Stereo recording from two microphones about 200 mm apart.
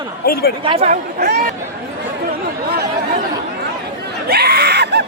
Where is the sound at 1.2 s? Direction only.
55° right (ahead or behind).